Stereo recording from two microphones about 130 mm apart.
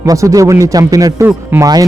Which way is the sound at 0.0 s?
25° right (ahead or behind).